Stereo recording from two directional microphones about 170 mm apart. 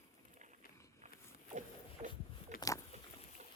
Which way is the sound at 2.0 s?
40° right (ahead or behind).